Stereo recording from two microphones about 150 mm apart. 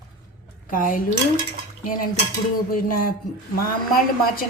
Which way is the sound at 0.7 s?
65° left (ahead or behind).